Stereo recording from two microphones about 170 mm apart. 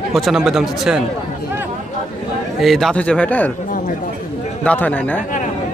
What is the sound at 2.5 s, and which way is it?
Speech, centre (ahead or behind).